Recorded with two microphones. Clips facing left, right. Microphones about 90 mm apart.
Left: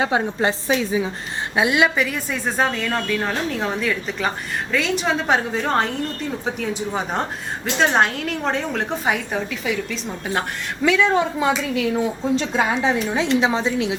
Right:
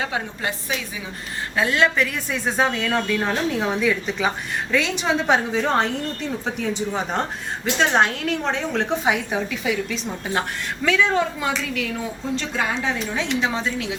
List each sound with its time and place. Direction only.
0.3 s a woman's voice: 30° left (ahead or behind)
1.5 s a woman's voice: 10° left (ahead or behind)
11.7 s a woman's voice: 20° left (ahead or behind)